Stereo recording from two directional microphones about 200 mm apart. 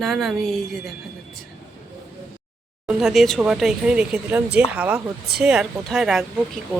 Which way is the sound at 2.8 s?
Centre (ahead or behind).